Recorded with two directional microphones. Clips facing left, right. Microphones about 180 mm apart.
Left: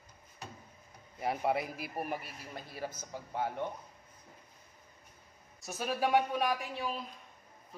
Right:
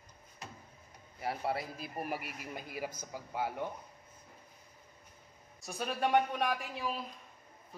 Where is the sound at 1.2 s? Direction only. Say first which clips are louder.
Left 4 dB; 20° left (ahead or behind).